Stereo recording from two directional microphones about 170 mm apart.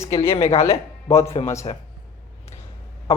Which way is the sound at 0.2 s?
35° left (ahead or behind).